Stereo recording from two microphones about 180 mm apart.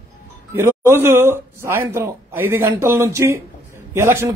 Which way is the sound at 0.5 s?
15° right (ahead or behind).